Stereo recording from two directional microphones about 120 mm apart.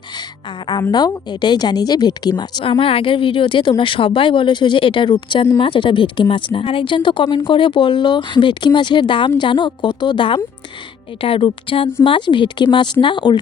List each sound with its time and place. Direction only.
0.7 s a woman's voice: 35° left (ahead or behind)
2.6 s a woman's voice: 50° left (ahead or behind)